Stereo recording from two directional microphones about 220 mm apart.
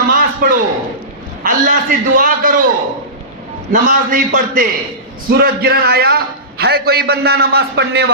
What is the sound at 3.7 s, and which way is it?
A man's voice, 40° right (ahead or behind).